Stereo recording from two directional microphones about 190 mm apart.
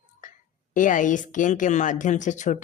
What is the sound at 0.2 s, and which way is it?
Speech, 40° left (ahead or behind).